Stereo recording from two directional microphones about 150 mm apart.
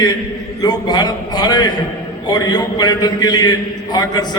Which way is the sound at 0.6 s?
25° left (ahead or behind).